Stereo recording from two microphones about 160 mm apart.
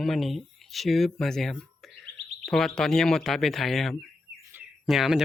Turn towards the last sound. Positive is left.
turn(degrees=0)  # may be behind; listen again after turning